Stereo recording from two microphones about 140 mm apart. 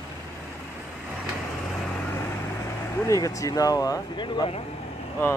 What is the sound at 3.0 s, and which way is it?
Speech, 25° left (ahead or behind).